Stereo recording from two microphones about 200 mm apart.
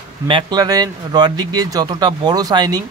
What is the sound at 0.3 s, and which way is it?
Speech, 25° right (ahead or behind).